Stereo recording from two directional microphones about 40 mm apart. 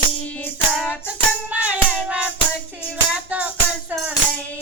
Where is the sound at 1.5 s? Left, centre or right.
Right.